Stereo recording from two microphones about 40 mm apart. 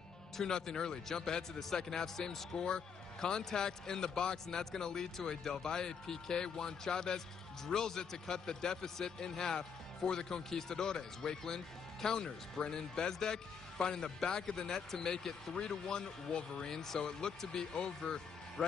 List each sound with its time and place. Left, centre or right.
0.4 s a man's voice: centre